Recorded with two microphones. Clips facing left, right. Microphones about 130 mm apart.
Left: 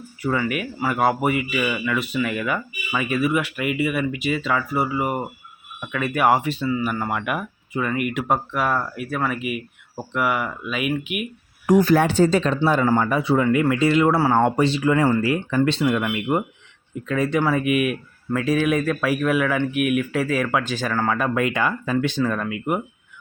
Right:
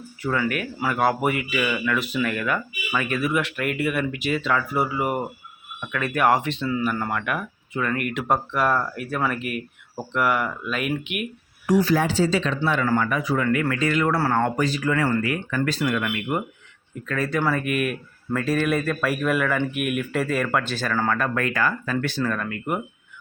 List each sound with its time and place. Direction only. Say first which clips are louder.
0.2 s speech: left 1 dB; 5° left (ahead or behind)
11.6 s speech: left 4 dB; 50° left (ahead or behind)
12.8 s speech: left 3 dB; 25° left (ahead or behind)
14.2 s speech: left 4 dB; 15° left (ahead or behind)
14.4 s speech: left 4 dB; 30° left (ahead or behind)
17.4 s speech: left 3 dB; 10° left (ahead or behind)
22.2 s speech: left 3 dB; 10° left (ahead or behind)